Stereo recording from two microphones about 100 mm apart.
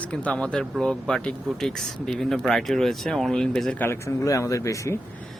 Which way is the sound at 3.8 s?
25° left (ahead or behind).